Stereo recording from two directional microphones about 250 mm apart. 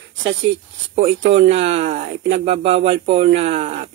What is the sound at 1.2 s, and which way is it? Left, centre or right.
Speech, right.